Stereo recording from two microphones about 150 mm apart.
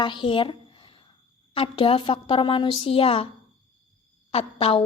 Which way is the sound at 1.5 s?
35° left (ahead or behind).